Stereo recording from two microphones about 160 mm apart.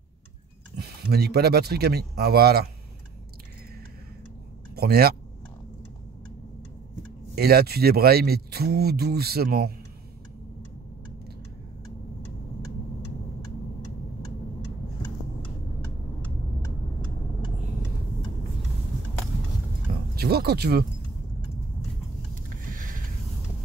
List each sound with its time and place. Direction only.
0.7 s speech: 85° right
4.7 s speech: 75° right (ahead or behind)
7.3 s speech: 80° right
20.2 s speech: 85° right
22.7 s a sound: 60° right (ahead or behind)